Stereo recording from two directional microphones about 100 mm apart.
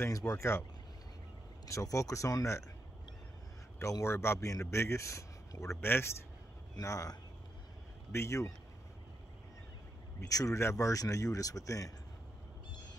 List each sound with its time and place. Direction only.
0.0 s a man's voice: 30° left (ahead or behind)
1.7 s speech: 30° left (ahead or behind)
3.8 s a man's voice: 30° left (ahead or behind)
10.2 s speech: 35° left (ahead or behind)